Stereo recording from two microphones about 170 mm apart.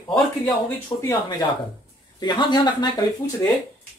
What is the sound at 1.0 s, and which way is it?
Speech, 25° left (ahead or behind).